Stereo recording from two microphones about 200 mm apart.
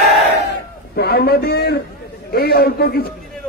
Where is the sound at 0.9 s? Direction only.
50° left (ahead or behind).